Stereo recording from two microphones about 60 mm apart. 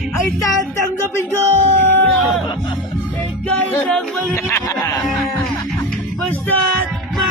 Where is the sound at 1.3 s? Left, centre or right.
Left.